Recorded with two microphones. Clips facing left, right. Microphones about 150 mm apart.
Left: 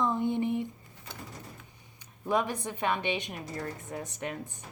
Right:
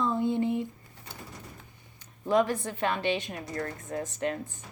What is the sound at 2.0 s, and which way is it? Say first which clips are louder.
Speech: right 4 dB; 15° left (ahead or behind).